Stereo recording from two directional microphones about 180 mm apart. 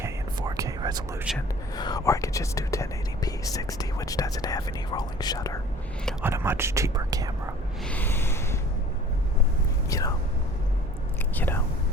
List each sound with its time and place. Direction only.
0.0 s whispering: 20° right (ahead or behind)
1.3 s speech: centre (ahead or behind)
1.7 s speech: 20° left (ahead or behind)
6.2 s speech: 10° right (ahead or behind)
7.9 s a sound: 10° left (ahead or behind)
9.9 s speech: 20° left (ahead or behind)
11.3 s a sound: 10° left (ahead or behind)